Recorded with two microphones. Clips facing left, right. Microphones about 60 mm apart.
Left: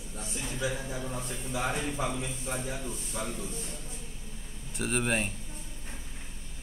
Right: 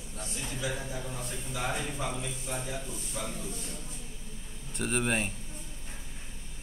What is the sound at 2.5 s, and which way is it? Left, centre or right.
Speech, left.